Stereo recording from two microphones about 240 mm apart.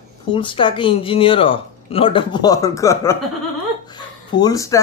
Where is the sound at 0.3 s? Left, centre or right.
Left.